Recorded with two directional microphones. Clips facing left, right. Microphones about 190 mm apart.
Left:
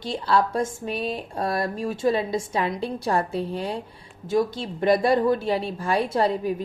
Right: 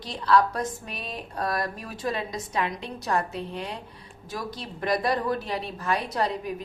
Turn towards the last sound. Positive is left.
turn(degrees=30)  # may be behind; listen again after turning